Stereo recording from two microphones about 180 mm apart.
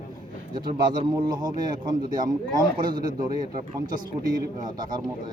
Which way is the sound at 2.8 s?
25° right (ahead or behind).